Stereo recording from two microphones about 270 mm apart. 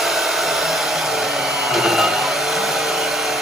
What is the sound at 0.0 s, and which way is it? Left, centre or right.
Hair dryer, centre.